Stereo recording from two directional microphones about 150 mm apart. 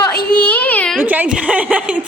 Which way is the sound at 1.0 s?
10° right (ahead or behind).